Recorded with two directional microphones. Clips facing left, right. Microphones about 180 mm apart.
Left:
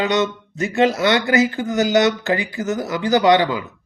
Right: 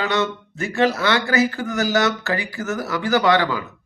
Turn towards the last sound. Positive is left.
turn(degrees=20)  # may be behind; listen again after turning